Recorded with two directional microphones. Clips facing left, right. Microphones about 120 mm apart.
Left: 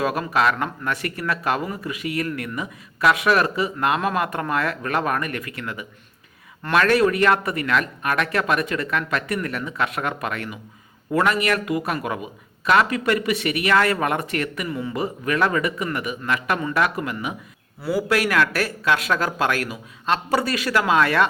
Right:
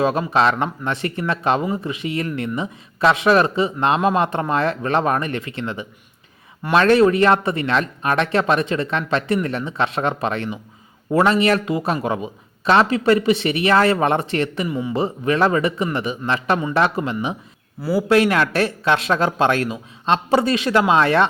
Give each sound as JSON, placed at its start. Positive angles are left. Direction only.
{"t": 0.0, "sound": "speech", "side_deg": -25}
{"t": 14.7, "sound": "a man's voice", "side_deg": -15}
{"t": 14.9, "sound": "speech", "side_deg": -25}
{"t": 17.8, "sound": "a man's voice", "side_deg": 0}
{"t": 18.1, "sound": "speech", "side_deg": -25}